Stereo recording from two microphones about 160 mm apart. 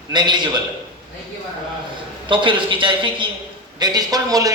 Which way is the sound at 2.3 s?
30° right (ahead or behind).